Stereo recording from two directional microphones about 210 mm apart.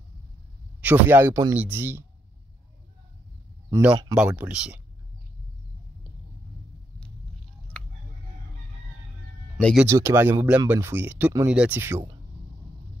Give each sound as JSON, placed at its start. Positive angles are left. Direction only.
{"t": 0.7, "sound": "speech", "side_deg": -10}
{"t": 3.7, "sound": "speech", "side_deg": -15}
{"t": 4.2, "sound": "speech", "side_deg": -5}
{"t": 9.8, "sound": "speech", "side_deg": -15}